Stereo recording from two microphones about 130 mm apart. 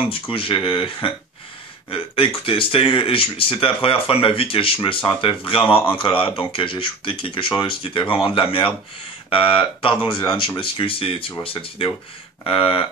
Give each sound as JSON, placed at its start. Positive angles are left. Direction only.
{"t": 0.1, "sound": "speech", "side_deg": 45}